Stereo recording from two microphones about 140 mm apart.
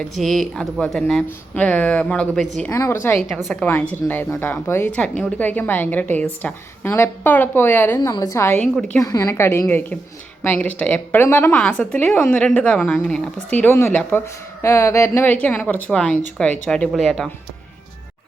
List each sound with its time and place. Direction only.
0.0 s a woman's voice: 5° left (ahead or behind)
2.6 s a woman's voice: 20° left (ahead or behind)
7.9 s a woman's voice: 25° left (ahead or behind); by 9.0 s 10° left (ahead or behind)
9.0 s a woman's voice: 25° left (ahead or behind); by 17.2 s centre (ahead or behind)